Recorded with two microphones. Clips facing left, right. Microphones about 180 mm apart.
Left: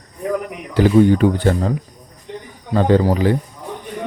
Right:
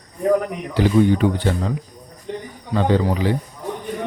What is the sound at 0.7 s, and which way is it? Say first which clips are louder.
Speech: left 4 dB; 45° left (ahead or behind).